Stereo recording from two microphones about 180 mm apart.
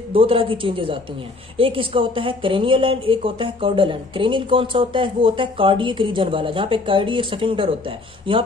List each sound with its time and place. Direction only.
0.1 s a woman's voice: 30° right (ahead or behind)